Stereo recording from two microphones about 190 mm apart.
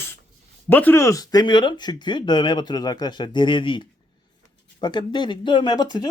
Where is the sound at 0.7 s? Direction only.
10° left (ahead or behind).